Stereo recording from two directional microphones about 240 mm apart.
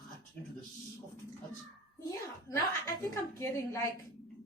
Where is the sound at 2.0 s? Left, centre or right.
Centre.